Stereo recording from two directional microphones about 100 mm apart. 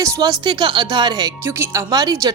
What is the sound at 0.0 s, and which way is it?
Speech, 40° right (ahead or behind).